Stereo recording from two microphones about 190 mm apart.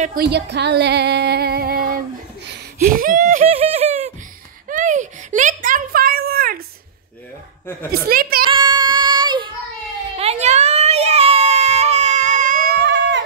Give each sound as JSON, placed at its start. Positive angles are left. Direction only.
{"t": 0.0, "sound": "female singing", "side_deg": -50}
{"t": 4.6, "sound": "a sound", "side_deg": -40}
{"t": 8.1, "sound": "a child's voice", "side_deg": -50}
{"t": 8.5, "sound": "child singing", "side_deg": -25}
{"t": 10.1, "sound": "music", "side_deg": -35}
{"t": 12.8, "sound": "a sound", "side_deg": -70}